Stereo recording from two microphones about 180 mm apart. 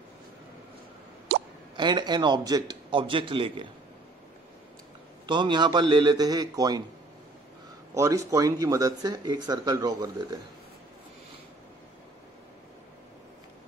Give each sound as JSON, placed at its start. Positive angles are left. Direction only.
{"t": 1.8, "sound": "speech", "side_deg": -25}
{"t": 5.2, "sound": "speech", "side_deg": -25}
{"t": 7.9, "sound": "speech", "side_deg": -15}